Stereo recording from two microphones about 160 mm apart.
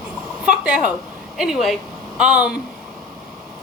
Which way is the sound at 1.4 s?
Centre (ahead or behind).